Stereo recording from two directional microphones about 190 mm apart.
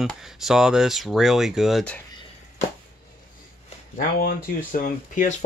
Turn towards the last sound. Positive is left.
turn(degrees=40)  # may be behind; listen again after turning